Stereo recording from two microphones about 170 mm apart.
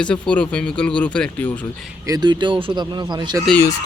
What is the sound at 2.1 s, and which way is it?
Speech, 25° right (ahead or behind).